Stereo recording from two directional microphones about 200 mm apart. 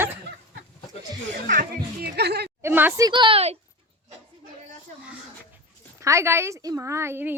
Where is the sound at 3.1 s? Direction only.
25° right (ahead or behind).